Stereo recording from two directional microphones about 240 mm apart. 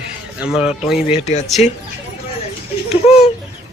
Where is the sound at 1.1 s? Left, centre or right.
Left.